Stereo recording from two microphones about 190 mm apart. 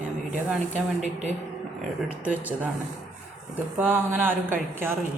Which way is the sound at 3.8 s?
10° right (ahead or behind).